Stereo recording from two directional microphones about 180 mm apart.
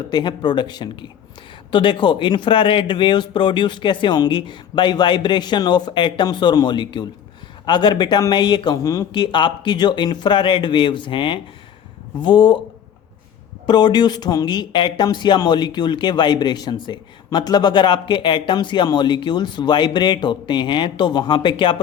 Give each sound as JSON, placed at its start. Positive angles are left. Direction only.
{"t": 0.1, "sound": "speech", "side_deg": 25}
{"t": 13.7, "sound": "speech", "side_deg": 25}